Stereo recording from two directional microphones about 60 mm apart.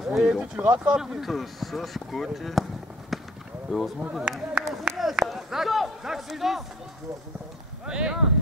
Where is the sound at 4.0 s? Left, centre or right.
Centre.